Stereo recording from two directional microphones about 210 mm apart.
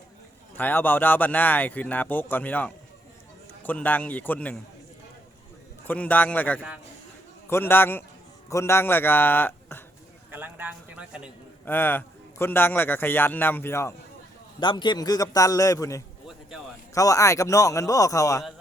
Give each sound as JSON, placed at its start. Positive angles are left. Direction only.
{"t": 0.5, "sound": "a man's voice", "side_deg": 10}
{"t": 5.9, "sound": "a man's voice", "side_deg": 10}
{"t": 10.3, "sound": "a man's voice", "side_deg": -10}
{"t": 11.6, "sound": "a man's voice", "side_deg": 10}